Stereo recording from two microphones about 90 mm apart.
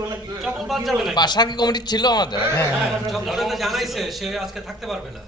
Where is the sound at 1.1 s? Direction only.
55° left (ahead or behind).